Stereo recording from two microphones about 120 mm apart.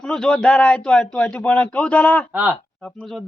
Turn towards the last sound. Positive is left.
turn(degrees=5)  # may be behind; listen again after turning